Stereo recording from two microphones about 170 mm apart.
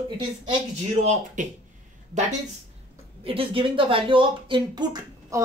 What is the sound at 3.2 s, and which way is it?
Speech, 30° right (ahead or behind).